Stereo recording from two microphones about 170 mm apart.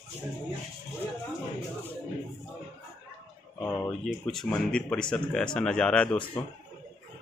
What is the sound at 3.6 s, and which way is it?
Speech, 5° left (ahead or behind).